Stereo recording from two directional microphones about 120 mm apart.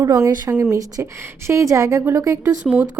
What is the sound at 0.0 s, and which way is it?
Speech, 30° right (ahead or behind).